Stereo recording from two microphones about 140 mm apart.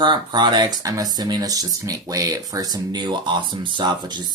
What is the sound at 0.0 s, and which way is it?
Speech, 35° right (ahead or behind).